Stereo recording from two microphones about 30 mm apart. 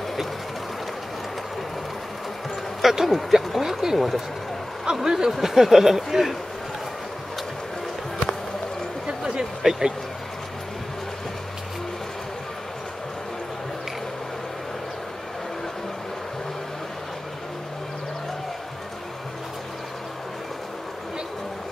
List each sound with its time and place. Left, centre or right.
2.8 s a sound: centre
3.1 s speech: centre
5.0 s speech: right
9.6 s speech: centre